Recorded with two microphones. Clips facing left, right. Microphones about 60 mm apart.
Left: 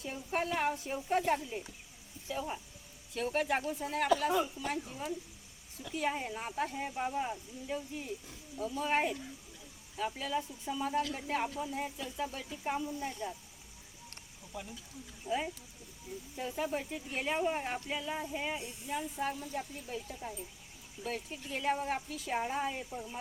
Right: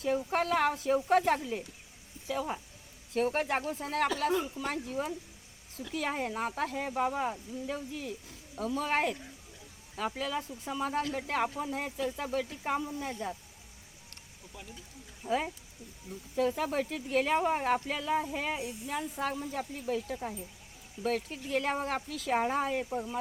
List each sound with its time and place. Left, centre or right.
0.0 s speech: right
3.1 s speech: right
15.3 s speech: right
16.4 s speech: right
19.1 s speech: right